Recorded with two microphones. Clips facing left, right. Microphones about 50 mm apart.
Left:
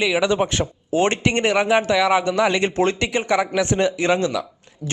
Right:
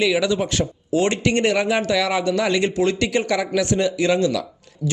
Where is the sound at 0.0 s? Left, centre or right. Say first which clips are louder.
Even; left.